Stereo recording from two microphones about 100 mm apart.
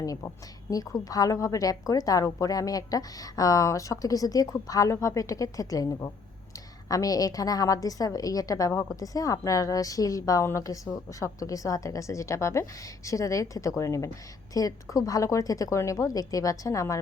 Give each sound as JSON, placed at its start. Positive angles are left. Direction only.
{"t": 0.0, "sound": "a woman's voice", "side_deg": 35}